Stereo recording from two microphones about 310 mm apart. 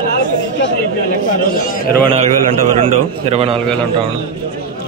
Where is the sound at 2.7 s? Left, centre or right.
Centre.